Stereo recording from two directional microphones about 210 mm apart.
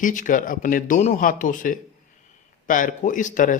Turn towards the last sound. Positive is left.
turn(degrees=40)  # may be behind; listen again after turning